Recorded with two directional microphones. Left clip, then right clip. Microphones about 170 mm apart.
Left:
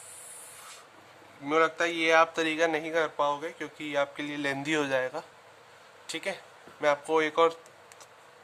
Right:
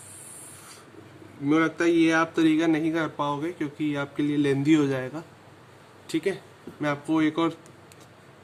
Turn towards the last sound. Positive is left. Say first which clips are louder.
# even
turn(degrees=25)  # may be behind; listen again after turning